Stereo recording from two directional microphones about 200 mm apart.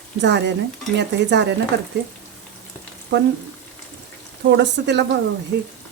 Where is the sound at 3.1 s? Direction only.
60° right (ahead or behind).